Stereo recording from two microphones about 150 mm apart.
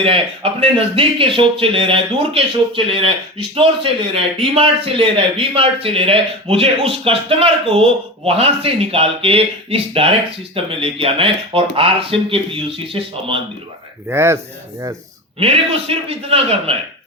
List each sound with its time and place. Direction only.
0.0 s a man's voice: 40° right (ahead or behind)
14.1 s a man's voice: 15° right (ahead or behind)
15.4 s a man's voice: 40° right (ahead or behind)